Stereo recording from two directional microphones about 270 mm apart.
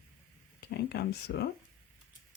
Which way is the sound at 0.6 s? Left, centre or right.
Left.